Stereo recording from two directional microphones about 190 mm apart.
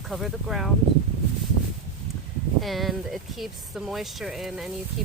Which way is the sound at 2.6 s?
Centre (ahead or behind).